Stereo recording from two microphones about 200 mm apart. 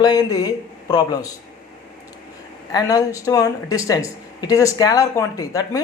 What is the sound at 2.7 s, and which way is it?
Speech, 20° left (ahead or behind).